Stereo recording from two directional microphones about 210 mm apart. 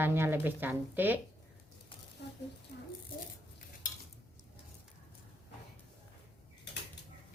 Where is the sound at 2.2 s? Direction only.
55° left (ahead or behind).